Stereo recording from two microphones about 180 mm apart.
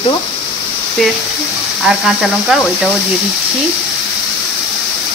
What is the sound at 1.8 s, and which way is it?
Speech, centre (ahead or behind).